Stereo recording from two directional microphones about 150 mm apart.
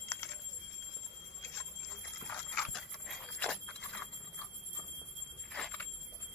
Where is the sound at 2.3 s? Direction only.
5° left (ahead or behind).